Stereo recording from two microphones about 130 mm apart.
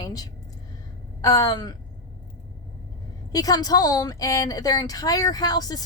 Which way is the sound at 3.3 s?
30° left (ahead or behind).